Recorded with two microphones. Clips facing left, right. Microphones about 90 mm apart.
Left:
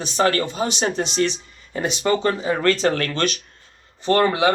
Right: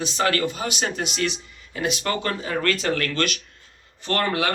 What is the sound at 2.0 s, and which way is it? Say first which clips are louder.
Speech: left 6 dB; 25° left (ahead or behind).